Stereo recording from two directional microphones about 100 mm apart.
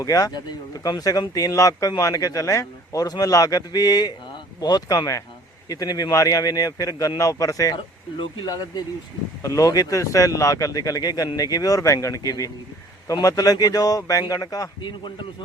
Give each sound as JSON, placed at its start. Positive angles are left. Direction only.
{"t": 0.0, "sound": "speech", "side_deg": 40}